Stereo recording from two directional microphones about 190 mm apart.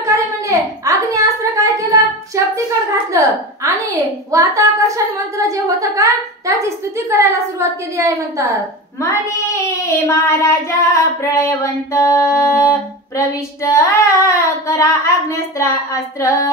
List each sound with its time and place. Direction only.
0.0 s a sound: 15° right (ahead or behind)
5.5 s a woman's voice: 15° right (ahead or behind)
9.1 s child singing: 15° left (ahead or behind)
13.7 s child singing: 15° left (ahead or behind)